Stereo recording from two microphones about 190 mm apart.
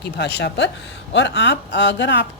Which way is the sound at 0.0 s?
60° left (ahead or behind).